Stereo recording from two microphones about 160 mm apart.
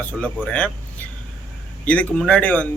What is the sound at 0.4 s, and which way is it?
Speech, 10° left (ahead or behind).